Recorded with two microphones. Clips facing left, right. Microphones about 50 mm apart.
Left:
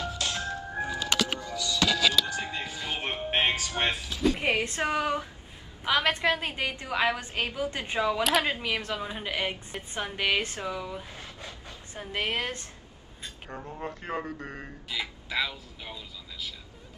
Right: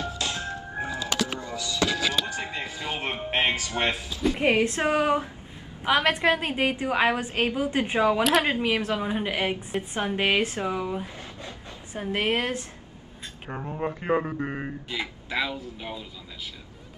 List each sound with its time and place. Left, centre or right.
0.0 s organ: right
0.7 s music: right
1.1 s music: left
1.4 s music: right
4.2 s a woman's voice: centre
4.7 s a woman's voice: right